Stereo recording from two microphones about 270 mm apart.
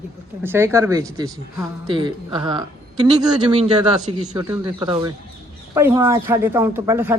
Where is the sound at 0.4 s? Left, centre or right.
Centre.